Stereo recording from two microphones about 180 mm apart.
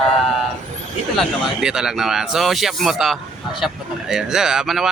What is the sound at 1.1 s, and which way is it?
Speech, centre (ahead or behind).